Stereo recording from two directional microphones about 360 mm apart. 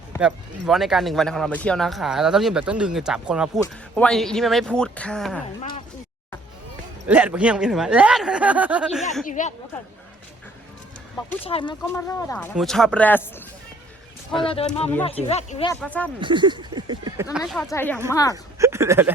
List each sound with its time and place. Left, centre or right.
0.2 s speech: centre
7.1 s speech: centre
9.2 s speech: left
11.4 s speech: centre
14.4 s speech: centre
15.8 s speech: centre
16.2 s speech: centre
17.3 s speech: centre
18.6 s speech: centre